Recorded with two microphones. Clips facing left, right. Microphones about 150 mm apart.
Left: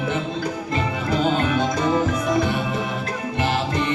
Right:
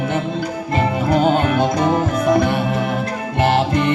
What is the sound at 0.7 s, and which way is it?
Music, 55° right (ahead or behind).